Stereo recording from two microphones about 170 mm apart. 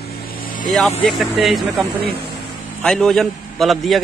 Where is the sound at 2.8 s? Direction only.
5° left (ahead or behind).